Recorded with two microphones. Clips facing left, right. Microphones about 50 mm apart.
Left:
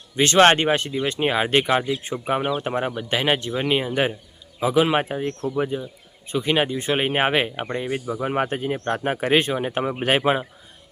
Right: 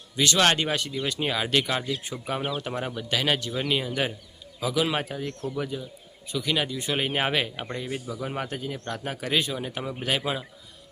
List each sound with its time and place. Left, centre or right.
0.2 s speech: left